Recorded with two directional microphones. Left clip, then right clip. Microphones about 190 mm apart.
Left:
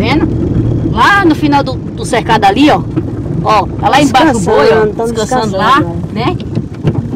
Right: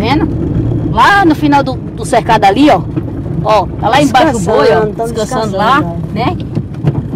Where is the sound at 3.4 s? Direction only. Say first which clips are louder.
Even; 15° right (ahead or behind).